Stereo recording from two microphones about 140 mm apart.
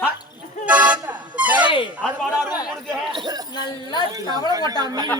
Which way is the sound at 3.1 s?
30° right (ahead or behind).